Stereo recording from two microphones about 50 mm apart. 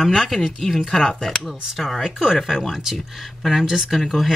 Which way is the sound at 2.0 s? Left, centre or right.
Centre.